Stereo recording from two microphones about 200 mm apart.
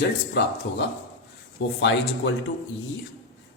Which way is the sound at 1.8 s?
65° left (ahead or behind).